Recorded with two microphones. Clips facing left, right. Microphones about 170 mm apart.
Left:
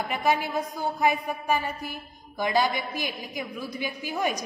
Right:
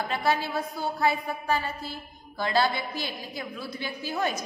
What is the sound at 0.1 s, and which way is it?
A woman's voice, 15° left (ahead or behind).